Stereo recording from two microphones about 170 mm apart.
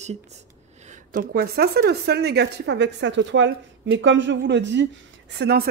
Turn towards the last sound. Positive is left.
turn(degrees=-70)  # may be behind; listen again after turning